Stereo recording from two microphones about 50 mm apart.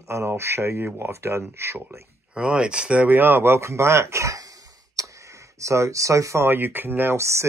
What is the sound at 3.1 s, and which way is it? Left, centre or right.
Speech, right.